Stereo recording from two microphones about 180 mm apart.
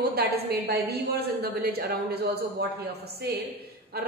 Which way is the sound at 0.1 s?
60° right (ahead or behind).